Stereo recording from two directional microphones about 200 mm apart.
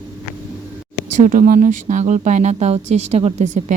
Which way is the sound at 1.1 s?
40° right (ahead or behind).